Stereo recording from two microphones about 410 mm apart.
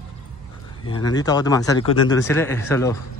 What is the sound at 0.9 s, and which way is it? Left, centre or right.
Speech, centre.